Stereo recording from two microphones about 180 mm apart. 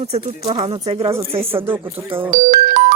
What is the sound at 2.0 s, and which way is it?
Speech, 10° right (ahead or behind).